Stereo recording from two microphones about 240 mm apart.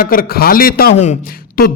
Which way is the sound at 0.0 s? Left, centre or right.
Left.